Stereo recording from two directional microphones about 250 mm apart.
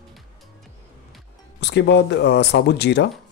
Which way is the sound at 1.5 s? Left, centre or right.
Left.